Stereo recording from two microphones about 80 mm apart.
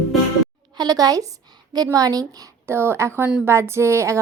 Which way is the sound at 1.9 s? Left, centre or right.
Right.